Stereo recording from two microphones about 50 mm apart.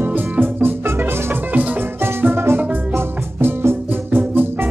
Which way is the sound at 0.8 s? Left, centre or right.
Right.